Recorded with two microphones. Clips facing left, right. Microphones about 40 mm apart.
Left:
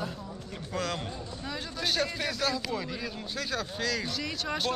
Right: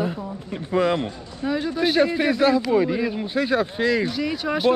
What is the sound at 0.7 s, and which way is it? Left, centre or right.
Speech, right.